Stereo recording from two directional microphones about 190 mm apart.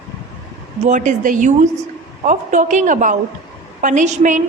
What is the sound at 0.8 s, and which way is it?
Speech, 40° right (ahead or behind).